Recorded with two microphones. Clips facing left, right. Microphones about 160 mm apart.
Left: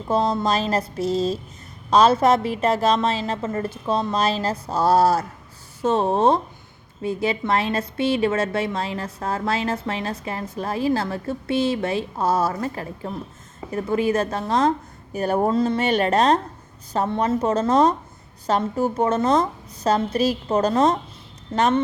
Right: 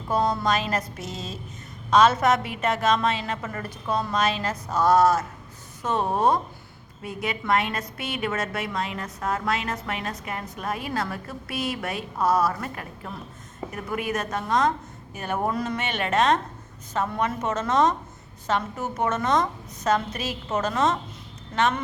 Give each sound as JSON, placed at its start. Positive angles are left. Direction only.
{"t": 0.1, "sound": "a woman's voice", "side_deg": 25}